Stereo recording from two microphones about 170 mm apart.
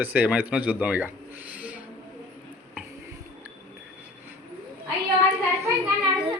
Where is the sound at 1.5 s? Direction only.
10° right (ahead or behind).